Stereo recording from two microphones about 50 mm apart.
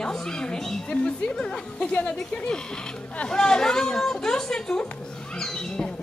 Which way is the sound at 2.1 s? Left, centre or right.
Centre.